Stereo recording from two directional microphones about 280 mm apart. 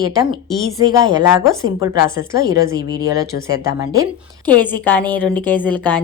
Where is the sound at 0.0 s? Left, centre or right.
Centre.